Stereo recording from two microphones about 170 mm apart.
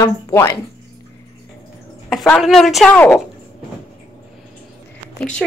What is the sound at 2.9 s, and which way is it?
Speech, 10° left (ahead or behind).